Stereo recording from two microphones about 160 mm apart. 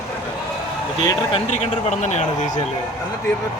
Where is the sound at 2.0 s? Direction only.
50° left (ahead or behind).